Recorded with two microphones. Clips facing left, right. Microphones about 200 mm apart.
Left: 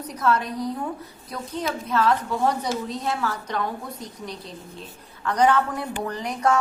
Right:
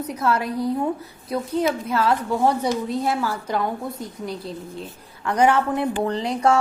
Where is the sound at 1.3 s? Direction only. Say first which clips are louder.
Right 7 dB; 30° right (ahead or behind).